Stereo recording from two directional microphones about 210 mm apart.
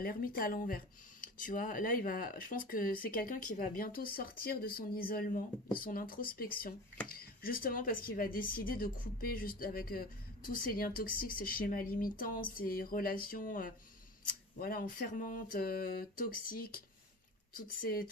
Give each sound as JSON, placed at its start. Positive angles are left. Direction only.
{"t": 0.0, "sound": "speech", "side_deg": 45}
{"t": 17.8, "sound": "speech", "side_deg": 40}